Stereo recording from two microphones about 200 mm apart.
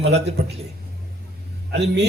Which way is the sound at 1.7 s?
60° right (ahead or behind).